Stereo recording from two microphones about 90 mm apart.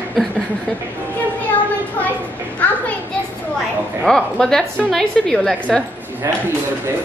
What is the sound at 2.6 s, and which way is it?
Speech, 15° left (ahead or behind).